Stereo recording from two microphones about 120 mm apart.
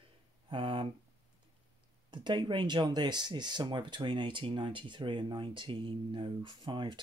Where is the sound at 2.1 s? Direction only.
40° right (ahead or behind).